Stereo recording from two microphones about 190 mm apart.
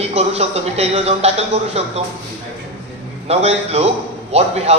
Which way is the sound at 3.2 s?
35° right (ahead or behind).